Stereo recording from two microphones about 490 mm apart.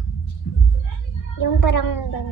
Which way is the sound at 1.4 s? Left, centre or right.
Left.